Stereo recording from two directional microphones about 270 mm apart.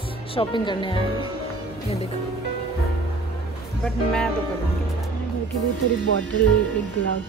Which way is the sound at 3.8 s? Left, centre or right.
Centre.